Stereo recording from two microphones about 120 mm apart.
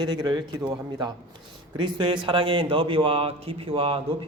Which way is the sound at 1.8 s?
40° right (ahead or behind).